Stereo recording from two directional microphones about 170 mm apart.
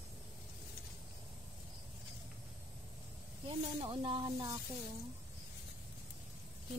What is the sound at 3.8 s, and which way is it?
Speech, 30° right (ahead or behind).